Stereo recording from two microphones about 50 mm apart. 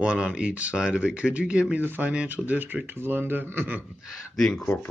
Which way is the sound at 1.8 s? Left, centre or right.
Right.